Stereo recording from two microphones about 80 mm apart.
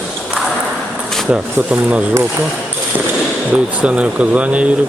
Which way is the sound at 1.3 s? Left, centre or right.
Centre.